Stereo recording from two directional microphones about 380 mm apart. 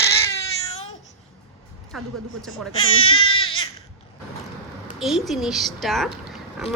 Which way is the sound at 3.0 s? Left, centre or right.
Centre.